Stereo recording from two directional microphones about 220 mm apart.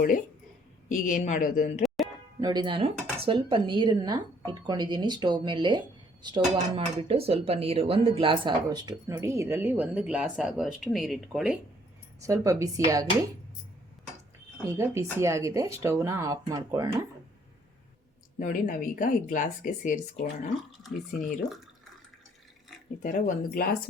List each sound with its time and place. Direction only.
0.9 s speech: 35° left (ahead or behind)
2.4 s speech: 20° right (ahead or behind); by 11.5 s centre (ahead or behind)
12.2 s speech: 15° right (ahead or behind)
14.7 s speech: 10° right (ahead or behind)
18.3 s speech: 35° left (ahead or behind)
23.0 s speech: 35° left (ahead or behind)